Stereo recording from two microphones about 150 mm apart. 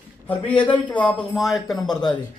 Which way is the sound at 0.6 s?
10° left (ahead or behind).